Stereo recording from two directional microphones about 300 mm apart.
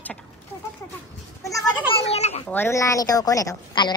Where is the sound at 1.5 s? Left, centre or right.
Centre.